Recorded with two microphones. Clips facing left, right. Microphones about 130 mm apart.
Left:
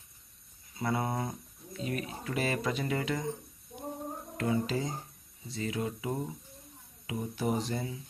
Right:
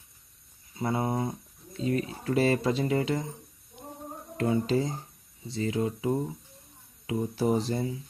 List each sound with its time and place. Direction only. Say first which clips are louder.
0.8 s speech: right 3 dB; 25° right (ahead or behind)
4.4 s speech: right 5 dB; 30° right (ahead or behind)